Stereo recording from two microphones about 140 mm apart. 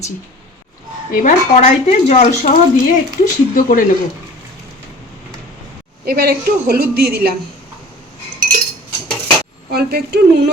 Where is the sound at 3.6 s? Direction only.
80° left.